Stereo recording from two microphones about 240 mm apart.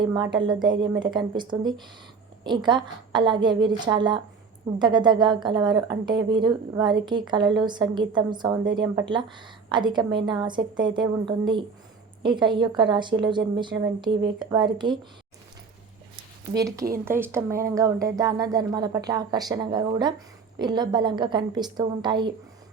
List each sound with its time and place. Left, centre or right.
0.0 s a woman's voice: centre
16.6 s speech: centre